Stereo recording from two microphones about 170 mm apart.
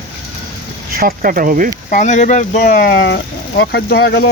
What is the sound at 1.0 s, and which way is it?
Speech, 55° right (ahead or behind).